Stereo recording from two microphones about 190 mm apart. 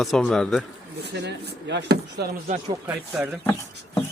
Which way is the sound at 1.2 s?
65° right (ahead or behind).